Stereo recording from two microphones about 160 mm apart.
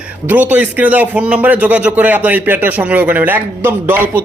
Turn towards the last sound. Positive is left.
turn(degrees=-15)  # may be behind; listen again after turning